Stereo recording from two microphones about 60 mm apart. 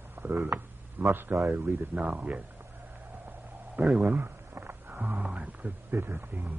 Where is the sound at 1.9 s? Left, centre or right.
Right.